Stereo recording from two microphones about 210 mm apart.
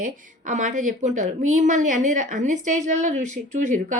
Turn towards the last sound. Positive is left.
turn(degrees=-35)  # may be behind; listen again after turning